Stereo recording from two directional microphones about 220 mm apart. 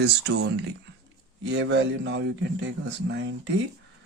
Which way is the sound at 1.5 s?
50° right (ahead or behind).